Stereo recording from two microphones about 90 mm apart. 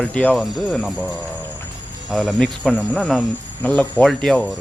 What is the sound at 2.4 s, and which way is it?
Speech, 10° left (ahead or behind).